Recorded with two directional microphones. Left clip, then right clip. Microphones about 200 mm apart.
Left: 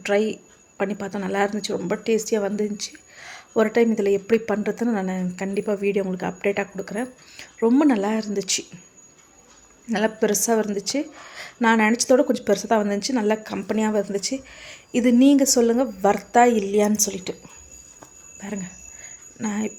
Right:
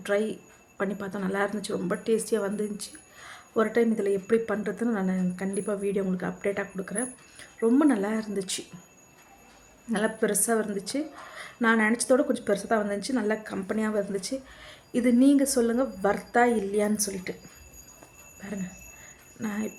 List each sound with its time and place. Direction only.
0.0 s speech: 15° left (ahead or behind)
9.9 s speech: 15° left (ahead or behind)
18.3 s a sound: 20° left (ahead or behind)
19.4 s speech: 15° left (ahead or behind)